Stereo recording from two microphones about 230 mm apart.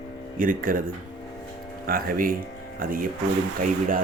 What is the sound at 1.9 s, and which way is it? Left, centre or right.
A man's voice, right.